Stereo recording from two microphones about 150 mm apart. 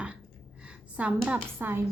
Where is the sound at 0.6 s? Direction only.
10° right (ahead or behind).